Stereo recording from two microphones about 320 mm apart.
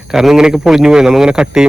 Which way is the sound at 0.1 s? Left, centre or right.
Centre.